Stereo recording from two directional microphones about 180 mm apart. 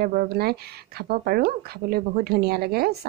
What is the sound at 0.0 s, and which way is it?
Speech, 55° right (ahead or behind).